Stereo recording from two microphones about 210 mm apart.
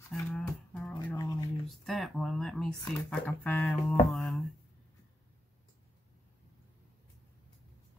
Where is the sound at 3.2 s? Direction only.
5° left (ahead or behind).